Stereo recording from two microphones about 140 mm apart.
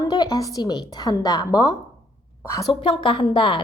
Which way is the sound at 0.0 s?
30° left (ahead or behind).